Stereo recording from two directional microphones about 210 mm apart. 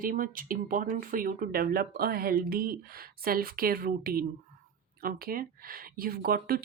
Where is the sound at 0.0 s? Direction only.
40° right (ahead or behind).